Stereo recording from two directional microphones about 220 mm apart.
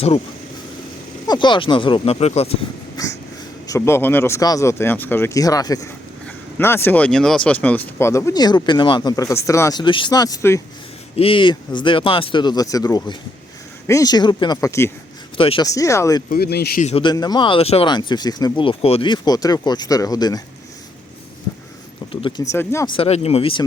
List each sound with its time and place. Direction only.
1.3 s speech: 20° left (ahead or behind)
3.7 s speech: 10° left (ahead or behind)
16.3 s speech: 45° left (ahead or behind)
16.8 s speech: 25° left (ahead or behind)
22.1 s speech: 20° left (ahead or behind)
23.0 s speech: 30° left (ahead or behind)